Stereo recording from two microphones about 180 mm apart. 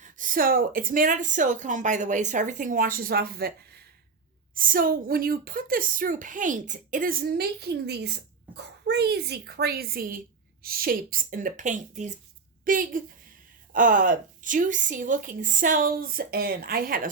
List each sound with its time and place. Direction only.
0.0 s a woman's voice: 50° right (ahead or behind)